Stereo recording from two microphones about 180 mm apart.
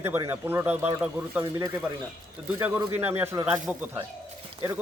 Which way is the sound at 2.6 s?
10° right (ahead or behind).